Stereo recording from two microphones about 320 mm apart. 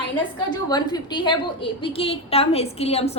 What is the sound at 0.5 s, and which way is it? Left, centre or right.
A woman's voice, centre.